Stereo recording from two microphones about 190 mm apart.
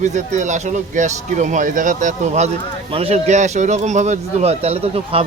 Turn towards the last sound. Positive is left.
turn(degrees=-30)  # may be behind; listen again after turning